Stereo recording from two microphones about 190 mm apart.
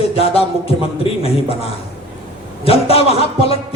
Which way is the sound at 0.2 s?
30° left (ahead or behind).